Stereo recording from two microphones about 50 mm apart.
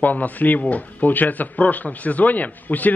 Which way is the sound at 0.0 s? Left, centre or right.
Left.